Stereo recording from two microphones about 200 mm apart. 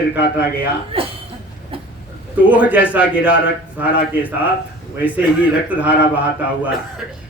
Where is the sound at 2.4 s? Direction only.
5° right (ahead or behind).